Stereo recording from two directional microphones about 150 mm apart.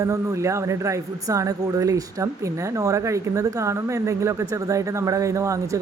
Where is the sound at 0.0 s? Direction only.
20° right (ahead or behind).